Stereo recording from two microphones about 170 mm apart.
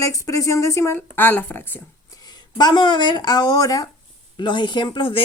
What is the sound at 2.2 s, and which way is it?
A woman's voice, 25° left (ahead or behind).